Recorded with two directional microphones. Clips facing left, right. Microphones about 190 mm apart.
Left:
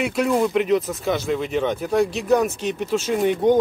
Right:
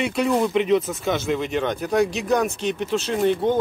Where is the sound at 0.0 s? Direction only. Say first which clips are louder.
Left 1 dB; centre (ahead or behind).